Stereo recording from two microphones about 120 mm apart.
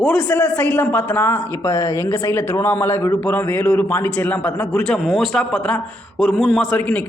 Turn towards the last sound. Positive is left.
turn(degrees=10)  # may be behind; listen again after turning